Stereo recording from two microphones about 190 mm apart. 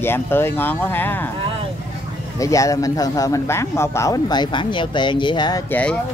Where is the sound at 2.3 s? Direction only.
15° left (ahead or behind).